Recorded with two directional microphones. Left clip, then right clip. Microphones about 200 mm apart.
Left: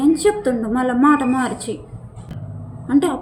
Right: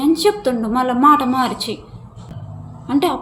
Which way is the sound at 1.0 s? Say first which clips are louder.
Right 4 dB; 65° right (ahead or behind).